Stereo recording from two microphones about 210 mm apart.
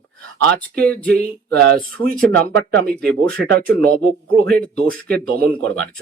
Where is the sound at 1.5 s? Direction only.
50° right (ahead or behind).